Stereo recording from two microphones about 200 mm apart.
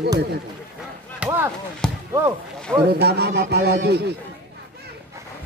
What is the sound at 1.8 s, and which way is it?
Basketball bounce, 5° left (ahead or behind).